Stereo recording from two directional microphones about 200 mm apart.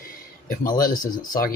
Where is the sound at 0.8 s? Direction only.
45° left (ahead or behind).